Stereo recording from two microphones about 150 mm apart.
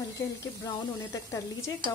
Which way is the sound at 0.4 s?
20° left (ahead or behind).